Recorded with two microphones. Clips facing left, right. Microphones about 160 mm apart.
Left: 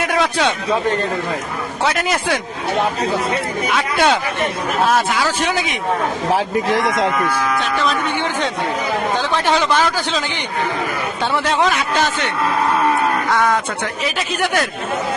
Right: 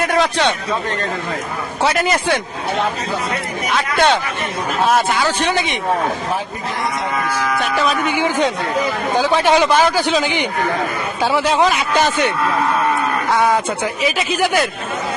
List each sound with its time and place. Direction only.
0.0 s a man's voice: centre (ahead or behind)
1.8 s a man's voice: centre (ahead or behind)
3.8 s a man's voice: 5° left (ahead or behind)
6.3 s a man's voice: 90° left
7.8 s speech: 5° right (ahead or behind)
11.2 s a man's voice: 5° right (ahead or behind)
13.3 s speech: 10° right (ahead or behind)
14.2 s a man's voice: centre (ahead or behind)